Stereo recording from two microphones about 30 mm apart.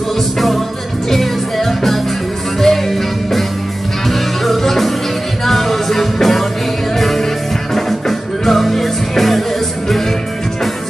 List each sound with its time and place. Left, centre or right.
1.1 s music: centre